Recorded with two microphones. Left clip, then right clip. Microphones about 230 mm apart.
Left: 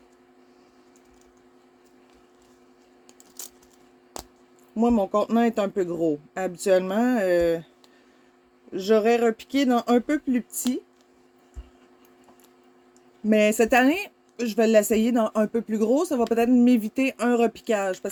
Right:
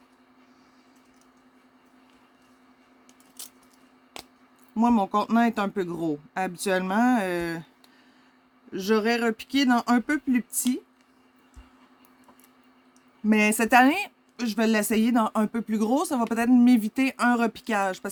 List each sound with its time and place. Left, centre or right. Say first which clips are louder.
4.8 s a woman's voice: left 1 dB; right
8.7 s a woman's voice: left 4 dB; right
13.2 s a woman's voice: left 3 dB; right